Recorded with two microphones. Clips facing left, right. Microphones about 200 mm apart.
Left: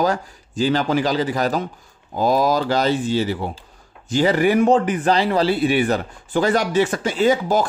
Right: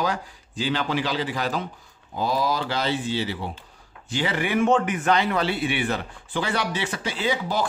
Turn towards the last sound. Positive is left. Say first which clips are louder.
# left 8 dB
turn(degrees=45)  # may be behind; listen again after turning